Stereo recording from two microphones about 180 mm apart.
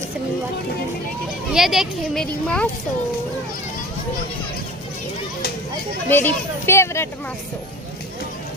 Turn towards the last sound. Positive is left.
turn(degrees=15)  # may be behind; listen again after turning